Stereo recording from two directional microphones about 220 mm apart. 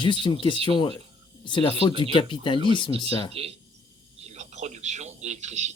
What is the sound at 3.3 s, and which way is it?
Speech, 25° right (ahead or behind).